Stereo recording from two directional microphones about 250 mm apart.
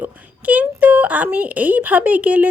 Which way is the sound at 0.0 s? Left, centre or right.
Centre.